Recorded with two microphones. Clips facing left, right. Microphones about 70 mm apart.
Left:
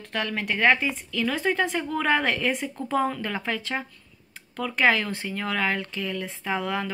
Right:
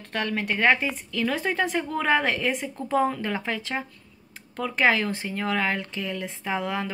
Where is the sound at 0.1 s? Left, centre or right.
Centre.